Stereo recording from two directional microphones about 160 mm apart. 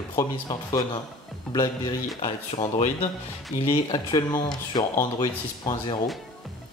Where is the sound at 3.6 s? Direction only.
30° left (ahead or behind).